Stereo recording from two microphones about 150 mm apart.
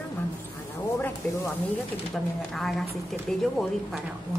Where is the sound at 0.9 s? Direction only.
15° left (ahead or behind).